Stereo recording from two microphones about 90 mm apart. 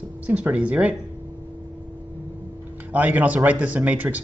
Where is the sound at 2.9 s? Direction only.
20° right (ahead or behind).